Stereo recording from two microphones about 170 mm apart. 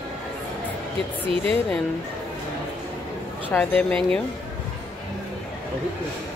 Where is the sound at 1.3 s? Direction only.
35° right (ahead or behind).